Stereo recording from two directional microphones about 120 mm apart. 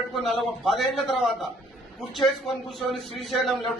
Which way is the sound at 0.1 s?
Centre (ahead or behind).